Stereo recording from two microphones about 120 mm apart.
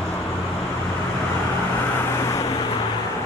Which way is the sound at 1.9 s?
25° left (ahead or behind).